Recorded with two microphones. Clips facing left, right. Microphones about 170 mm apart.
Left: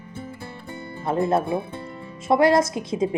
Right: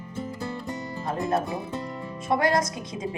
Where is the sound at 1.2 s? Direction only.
30° left (ahead or behind).